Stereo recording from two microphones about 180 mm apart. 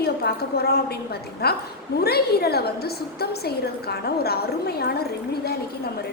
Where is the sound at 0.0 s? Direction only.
60° left (ahead or behind).